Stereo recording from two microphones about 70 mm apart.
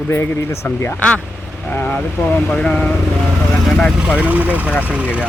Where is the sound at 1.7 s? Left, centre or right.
Left.